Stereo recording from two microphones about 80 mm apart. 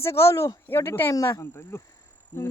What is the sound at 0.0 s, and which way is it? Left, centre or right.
Speech, left.